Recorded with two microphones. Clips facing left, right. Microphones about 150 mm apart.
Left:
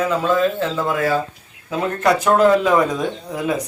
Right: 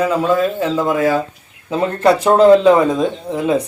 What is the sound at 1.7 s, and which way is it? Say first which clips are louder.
A man's voice: right 4 dB; 30° right (ahead or behind).